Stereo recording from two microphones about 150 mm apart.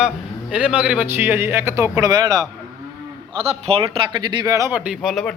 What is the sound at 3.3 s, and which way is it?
Speech, 40° right (ahead or behind).